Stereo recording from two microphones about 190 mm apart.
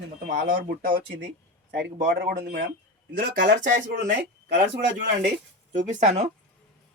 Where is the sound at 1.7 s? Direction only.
60° right (ahead or behind).